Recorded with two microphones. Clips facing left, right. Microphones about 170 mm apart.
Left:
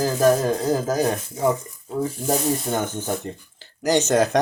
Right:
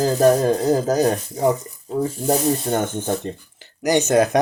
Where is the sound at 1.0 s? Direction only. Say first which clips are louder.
Right 3 dB; 35° right (ahead or behind).